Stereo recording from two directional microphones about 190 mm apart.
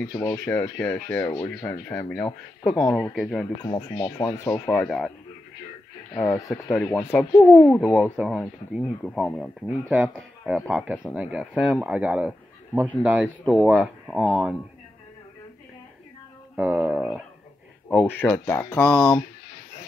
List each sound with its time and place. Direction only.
0.1 s speech: 15° left (ahead or behind)
3.6 s speech: 25° left (ahead or behind); by 5.1 s centre (ahead or behind)
6.1 s speech: 15° left (ahead or behind)
8.0 s speech: 5° right (ahead or behind)
16.5 s speech: 5° right (ahead or behind)
17.8 s speech: 5° left (ahead or behind)